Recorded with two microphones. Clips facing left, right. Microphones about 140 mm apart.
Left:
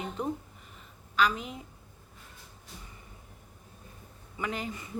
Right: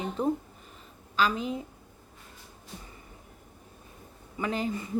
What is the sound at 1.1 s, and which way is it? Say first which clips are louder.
Speech: right 1 dB; 30° right (ahead or behind).